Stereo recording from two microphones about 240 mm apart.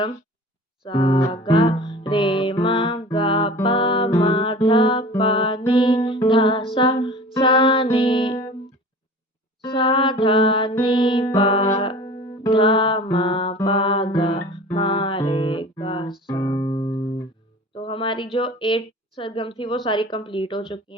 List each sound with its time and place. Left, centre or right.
0.9 s music: centre
9.6 s music: left
17.7 s a woman's voice: left